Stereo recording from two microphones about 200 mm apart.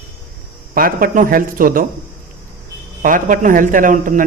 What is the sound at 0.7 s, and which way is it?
A man's voice, 45° right (ahead or behind).